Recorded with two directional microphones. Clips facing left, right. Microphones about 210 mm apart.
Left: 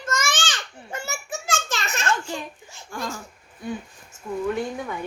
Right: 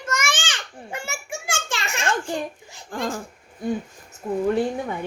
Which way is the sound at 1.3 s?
15° right (ahead or behind).